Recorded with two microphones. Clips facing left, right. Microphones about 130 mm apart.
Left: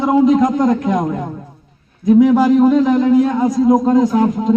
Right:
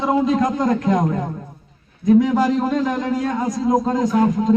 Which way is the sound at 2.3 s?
5° left (ahead or behind).